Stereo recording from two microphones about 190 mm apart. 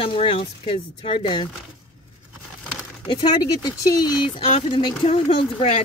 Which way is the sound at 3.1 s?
25° left (ahead or behind).